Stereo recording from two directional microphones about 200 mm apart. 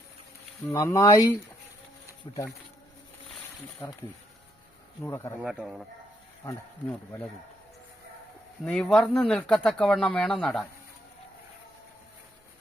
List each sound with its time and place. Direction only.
0.7 s speech: 15° left (ahead or behind)
5.0 s speech: 10° left (ahead or behind)
5.4 s speech: 5° right (ahead or behind)
6.8 s speech: 5° left (ahead or behind)
8.6 s speech: 5° left (ahead or behind)